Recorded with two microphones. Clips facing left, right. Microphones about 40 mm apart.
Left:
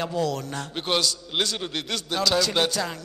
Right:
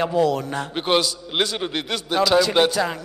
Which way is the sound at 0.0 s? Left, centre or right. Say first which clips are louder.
Right 7 dB; centre.